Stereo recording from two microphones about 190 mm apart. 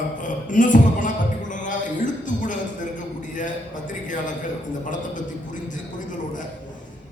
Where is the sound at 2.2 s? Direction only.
40° left (ahead or behind).